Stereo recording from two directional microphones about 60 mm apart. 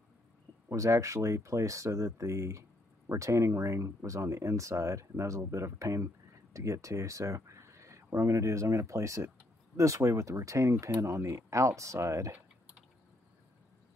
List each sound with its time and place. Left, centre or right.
0.7 s speech: right